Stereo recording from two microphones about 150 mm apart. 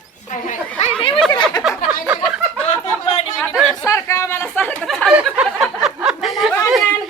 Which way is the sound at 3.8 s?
20° left (ahead or behind).